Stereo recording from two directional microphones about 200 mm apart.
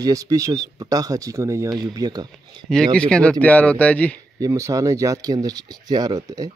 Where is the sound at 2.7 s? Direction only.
5° left (ahead or behind).